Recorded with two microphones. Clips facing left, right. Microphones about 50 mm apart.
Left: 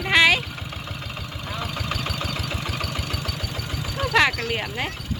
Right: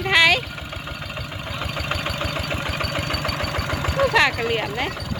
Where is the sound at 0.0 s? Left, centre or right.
Centre.